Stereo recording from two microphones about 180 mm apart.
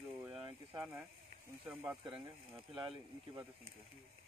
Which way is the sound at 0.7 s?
5° right (ahead or behind).